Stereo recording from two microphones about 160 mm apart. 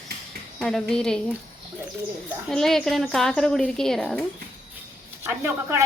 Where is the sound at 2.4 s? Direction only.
Centre (ahead or behind).